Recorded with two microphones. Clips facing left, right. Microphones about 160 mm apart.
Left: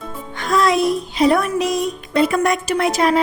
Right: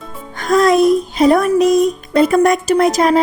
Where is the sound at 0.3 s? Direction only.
45° right (ahead or behind).